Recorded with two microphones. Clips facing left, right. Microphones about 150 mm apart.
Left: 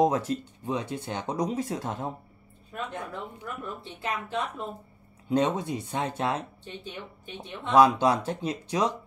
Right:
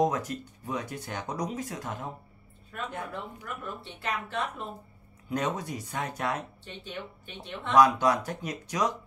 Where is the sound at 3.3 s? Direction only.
20° left (ahead or behind).